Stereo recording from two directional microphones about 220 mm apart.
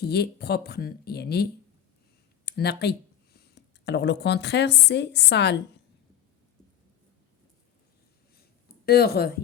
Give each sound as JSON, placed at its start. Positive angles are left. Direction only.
{"t": 0.0, "sound": "a woman's voice", "side_deg": 50}
{"t": 8.9, "sound": "speech", "side_deg": 45}